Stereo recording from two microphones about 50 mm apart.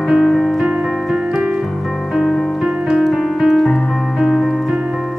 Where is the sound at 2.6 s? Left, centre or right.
Centre.